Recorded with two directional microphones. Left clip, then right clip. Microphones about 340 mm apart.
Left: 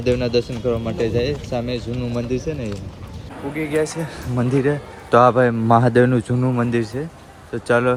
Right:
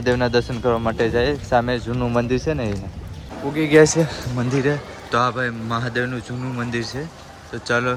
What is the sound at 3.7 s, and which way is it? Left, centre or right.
Speech, right.